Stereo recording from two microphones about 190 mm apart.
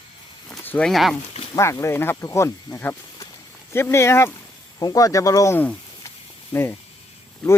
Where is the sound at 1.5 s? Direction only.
15° left (ahead or behind).